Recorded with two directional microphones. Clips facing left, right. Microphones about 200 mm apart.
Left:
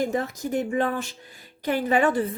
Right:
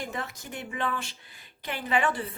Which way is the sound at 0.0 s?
40° left (ahead or behind).